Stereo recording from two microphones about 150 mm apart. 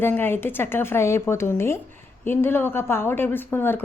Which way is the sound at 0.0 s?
15° left (ahead or behind).